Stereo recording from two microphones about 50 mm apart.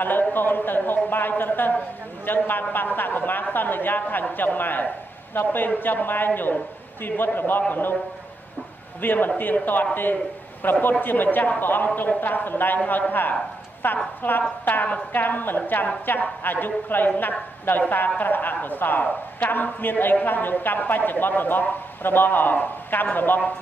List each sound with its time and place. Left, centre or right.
0.0 s a woman's voice: left
9.0 s a woman's voice: left